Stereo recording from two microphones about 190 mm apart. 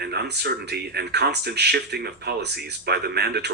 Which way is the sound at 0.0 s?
60° right (ahead or behind).